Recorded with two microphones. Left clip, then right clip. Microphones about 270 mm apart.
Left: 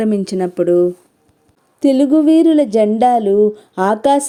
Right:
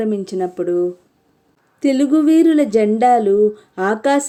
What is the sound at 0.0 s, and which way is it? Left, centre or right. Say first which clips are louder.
A woman's voice: left 3 dB; left.